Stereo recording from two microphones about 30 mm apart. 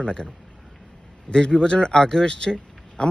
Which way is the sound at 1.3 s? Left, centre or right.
Left.